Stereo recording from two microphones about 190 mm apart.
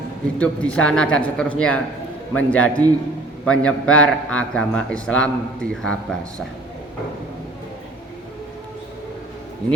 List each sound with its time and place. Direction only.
0.3 s a man's voice: 5° left (ahead or behind)